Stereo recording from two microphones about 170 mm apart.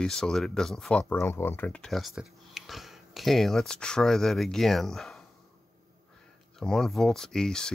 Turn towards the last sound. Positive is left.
turn(degrees=5)  # may be behind; listen again after turning